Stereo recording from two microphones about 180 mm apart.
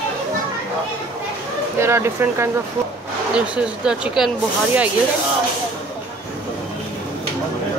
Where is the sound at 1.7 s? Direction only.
15° right (ahead or behind).